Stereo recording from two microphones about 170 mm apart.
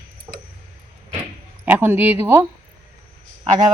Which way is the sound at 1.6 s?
10° right (ahead or behind).